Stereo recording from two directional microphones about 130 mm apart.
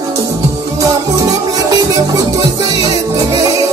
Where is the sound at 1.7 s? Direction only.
30° right (ahead or behind).